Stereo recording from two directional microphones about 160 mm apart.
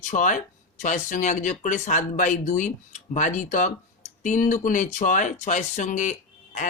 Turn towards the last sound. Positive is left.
turn(degrees=50)  # may be behind; listen again after turning